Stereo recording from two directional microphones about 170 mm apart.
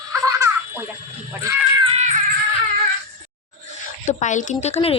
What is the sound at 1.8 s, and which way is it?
Music, 35° right (ahead or behind).